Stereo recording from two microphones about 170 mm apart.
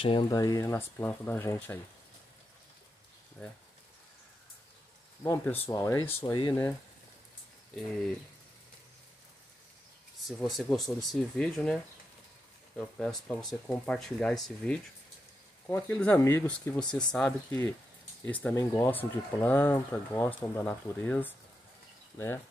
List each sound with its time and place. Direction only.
0.0 s speech: 30° left (ahead or behind); by 1.8 s 15° left (ahead or behind)
3.4 s speech: 10° left (ahead or behind)
5.2 s speech: 15° left (ahead or behind)
10.2 s speech: centre (ahead or behind)